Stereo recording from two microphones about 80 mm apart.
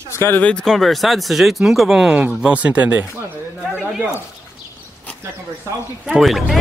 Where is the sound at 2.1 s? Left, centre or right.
Centre.